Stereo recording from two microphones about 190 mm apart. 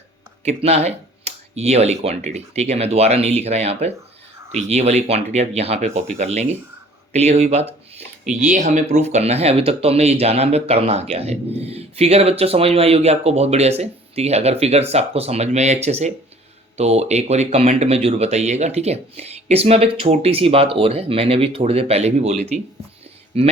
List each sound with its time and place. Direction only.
0.4 s speech: 35° right (ahead or behind)